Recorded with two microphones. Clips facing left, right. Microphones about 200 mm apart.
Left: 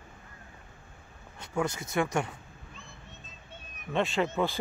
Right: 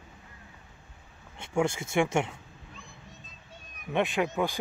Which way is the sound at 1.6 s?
25° right (ahead or behind).